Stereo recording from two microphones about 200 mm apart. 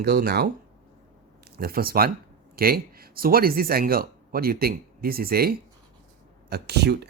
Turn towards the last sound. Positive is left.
turn(degrees=-55)  # may be behind; listen again after turning